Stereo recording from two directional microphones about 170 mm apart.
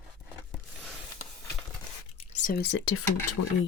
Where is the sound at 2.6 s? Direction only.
90° left.